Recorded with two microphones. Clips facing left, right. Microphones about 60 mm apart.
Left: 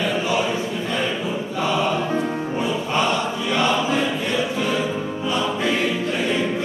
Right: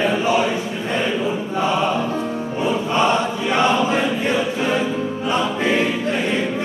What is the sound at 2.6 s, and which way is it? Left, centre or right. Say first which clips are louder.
Music: right 4 dB; right.